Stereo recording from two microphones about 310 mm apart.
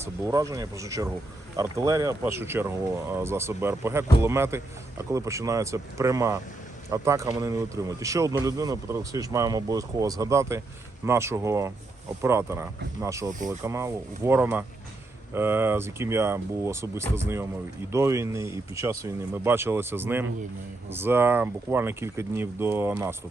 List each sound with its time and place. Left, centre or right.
0.3 s a man's voice: centre